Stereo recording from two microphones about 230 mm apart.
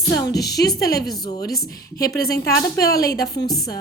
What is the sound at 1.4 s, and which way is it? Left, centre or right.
A woman's voice, left.